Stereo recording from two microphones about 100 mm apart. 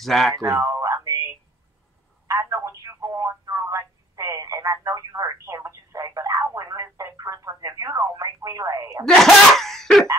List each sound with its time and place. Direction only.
0.0 s laughter: 5° left (ahead or behind)
0.4 s a sound: 30° right (ahead or behind)
2.2 s telephone: 35° right (ahead or behind)
9.0 s laughter: 5° left (ahead or behind)